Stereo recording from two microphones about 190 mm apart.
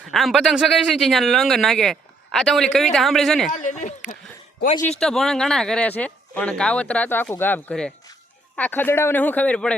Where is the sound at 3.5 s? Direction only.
40° left (ahead or behind).